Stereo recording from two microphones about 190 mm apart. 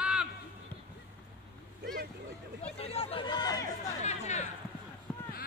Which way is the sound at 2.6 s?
30° left (ahead or behind).